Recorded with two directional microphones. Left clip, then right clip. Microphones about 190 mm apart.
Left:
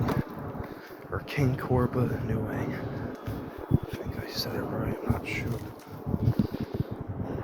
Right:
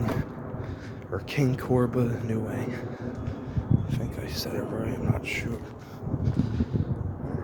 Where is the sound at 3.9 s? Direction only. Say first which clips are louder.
Even; 45° right (ahead or behind).